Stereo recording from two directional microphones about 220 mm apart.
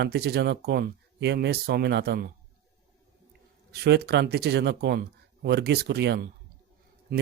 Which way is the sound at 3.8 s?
50° right (ahead or behind).